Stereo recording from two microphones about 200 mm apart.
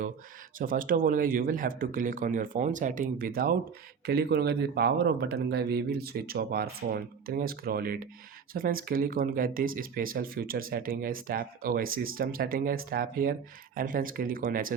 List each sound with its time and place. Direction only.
0.6 s speech: 45° right (ahead or behind)